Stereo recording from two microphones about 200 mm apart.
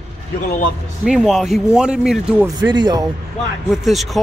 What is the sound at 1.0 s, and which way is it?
Speech, centre (ahead or behind).